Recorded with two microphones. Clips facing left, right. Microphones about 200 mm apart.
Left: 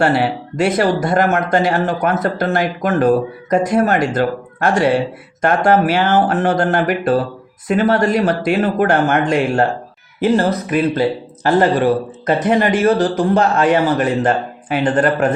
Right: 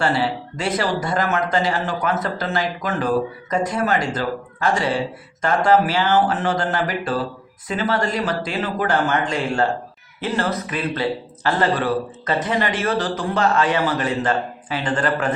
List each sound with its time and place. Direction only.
0.0 s speech: 65° left (ahead or behind)
10.3 s a man's voice: 40° left (ahead or behind)